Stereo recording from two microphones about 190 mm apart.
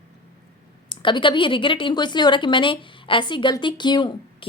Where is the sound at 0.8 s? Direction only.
25° left (ahead or behind).